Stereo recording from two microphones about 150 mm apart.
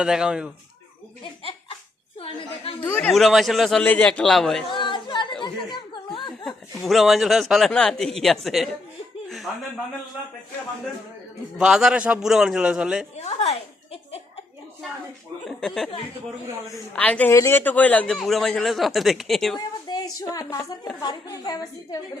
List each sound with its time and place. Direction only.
0.0 s speech: 5° right (ahead or behind)
2.1 s a woman's voice: 40° left (ahead or behind)
2.8 s a woman's voice: 15° left (ahead or behind)
3.1 s speech: centre (ahead or behind)
4.7 s chatter: 35° left (ahead or behind)
5.4 s a sound: 30° left (ahead or behind)
6.7 s speech: centre (ahead or behind)
11.5 s speech: 5° right (ahead or behind)
13.2 s a sound: 45° left (ahead or behind)
15.4 s speech: centre (ahead or behind)
16.9 s a woman's voice: 10° left (ahead or behind)
19.5 s a woman's voice: 25° left (ahead or behind)